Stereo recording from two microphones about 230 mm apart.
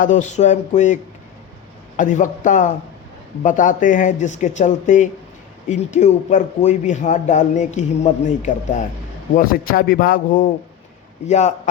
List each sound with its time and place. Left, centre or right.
0.0 s speech: left
2.0 s speech: left